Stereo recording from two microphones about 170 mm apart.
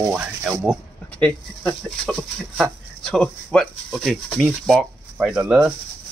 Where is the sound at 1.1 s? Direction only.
5° left (ahead or behind).